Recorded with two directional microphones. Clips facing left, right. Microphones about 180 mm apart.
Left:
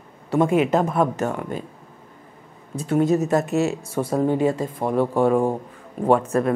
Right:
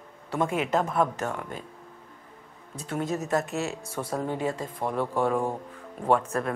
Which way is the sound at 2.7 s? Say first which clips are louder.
Left 11 dB; 10° left (ahead or behind).